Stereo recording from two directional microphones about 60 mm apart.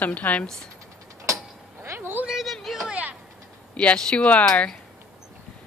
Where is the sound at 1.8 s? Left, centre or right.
Right.